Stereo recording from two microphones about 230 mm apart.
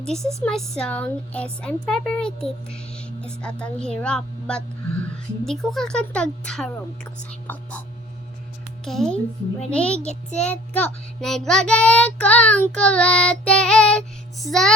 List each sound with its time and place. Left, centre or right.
0.2 s speech: centre
0.4 s speech: centre
8.8 s speech: centre